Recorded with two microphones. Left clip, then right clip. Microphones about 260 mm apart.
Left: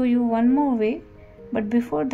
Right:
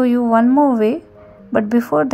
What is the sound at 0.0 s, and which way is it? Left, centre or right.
Speech, right.